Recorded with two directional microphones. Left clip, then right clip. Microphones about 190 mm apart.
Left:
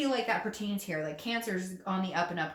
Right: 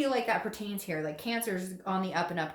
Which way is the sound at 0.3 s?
35° right (ahead or behind).